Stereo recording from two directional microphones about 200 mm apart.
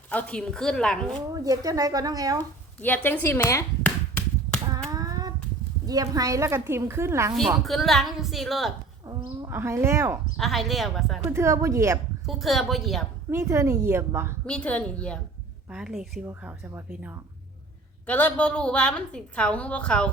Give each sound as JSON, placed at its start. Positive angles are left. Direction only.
{"t": 0.1, "sound": "a woman's voice", "side_deg": 5}
{"t": 1.3, "sound": "a woman's voice", "side_deg": -20}
{"t": 2.8, "sound": "a sound", "side_deg": 10}
{"t": 4.9, "sound": "child singing", "side_deg": -20}
{"t": 5.8, "sound": "a woman's voice", "side_deg": -20}
{"t": 7.6, "sound": "a woman's voice", "side_deg": 0}
{"t": 9.0, "sound": "speech", "side_deg": -20}
{"t": 10.3, "sound": "a woman's voice", "side_deg": 0}
{"t": 11.3, "sound": "a woman's voice", "side_deg": -15}
{"t": 12.2, "sound": "a woman's voice", "side_deg": 0}
{"t": 13.3, "sound": "a woman's voice", "side_deg": -15}
{"t": 14.4, "sound": "a woman's voice", "side_deg": 5}
{"t": 18.0, "sound": "a woman's voice", "side_deg": 10}